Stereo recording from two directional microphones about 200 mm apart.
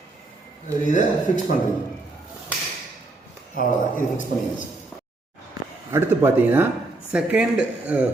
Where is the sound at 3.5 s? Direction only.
40° left (ahead or behind).